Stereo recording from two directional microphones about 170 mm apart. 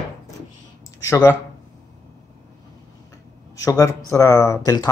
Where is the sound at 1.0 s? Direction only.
15° left (ahead or behind).